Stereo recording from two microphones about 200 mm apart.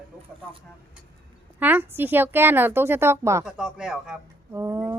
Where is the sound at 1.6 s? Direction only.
10° right (ahead or behind).